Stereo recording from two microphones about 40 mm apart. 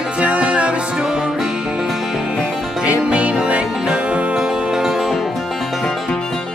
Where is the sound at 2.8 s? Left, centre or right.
Right.